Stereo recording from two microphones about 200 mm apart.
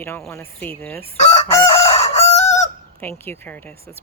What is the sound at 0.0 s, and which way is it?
Speech, 10° left (ahead or behind).